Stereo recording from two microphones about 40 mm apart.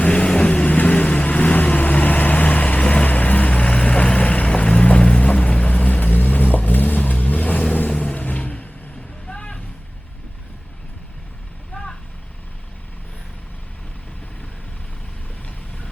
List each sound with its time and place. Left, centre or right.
0.0 s vehicle: left
4.9 s music: left
5.2 s music: left
7.9 s vehicle: left
8.1 s a sound: left
9.2 s vehicle: left